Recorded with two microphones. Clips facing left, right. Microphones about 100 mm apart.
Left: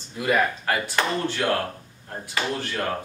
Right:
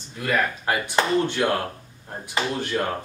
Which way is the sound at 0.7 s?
15° right (ahead or behind).